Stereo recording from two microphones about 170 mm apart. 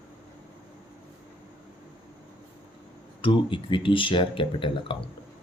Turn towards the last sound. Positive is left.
turn(degrees=30)  # may be behind; listen again after turning